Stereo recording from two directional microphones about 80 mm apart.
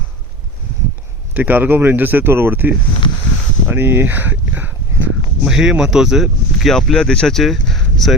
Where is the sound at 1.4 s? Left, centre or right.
Right.